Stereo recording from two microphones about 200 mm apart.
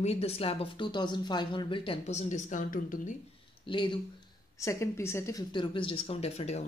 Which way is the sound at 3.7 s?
25° left (ahead or behind).